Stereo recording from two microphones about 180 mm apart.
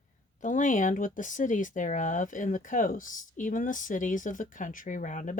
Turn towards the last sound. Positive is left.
turn(degrees=45)  # may be behind; listen again after turning